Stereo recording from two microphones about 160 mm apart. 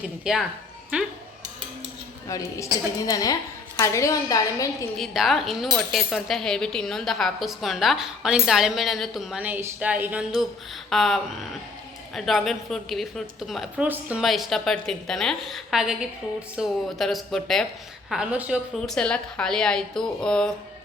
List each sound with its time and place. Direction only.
0.0 s speech: 5° right (ahead or behind)
2.2 s a woman's voice: 20° left (ahead or behind)
4.9 s speech: centre (ahead or behind)
18.8 s speech: 5° left (ahead or behind)